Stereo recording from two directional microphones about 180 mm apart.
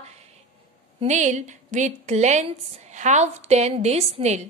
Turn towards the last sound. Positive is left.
turn(degrees=-35)  # may be behind; listen again after turning